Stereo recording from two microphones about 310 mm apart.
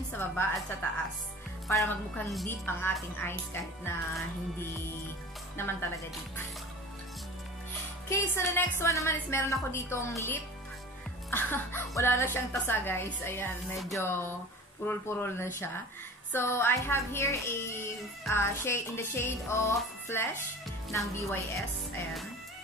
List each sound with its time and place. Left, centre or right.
1.7 s a woman's voice: centre
5.6 s a woman's voice: centre
8.1 s a woman's voice: centre